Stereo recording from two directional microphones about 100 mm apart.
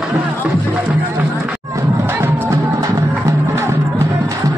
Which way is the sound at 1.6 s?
30° right (ahead or behind).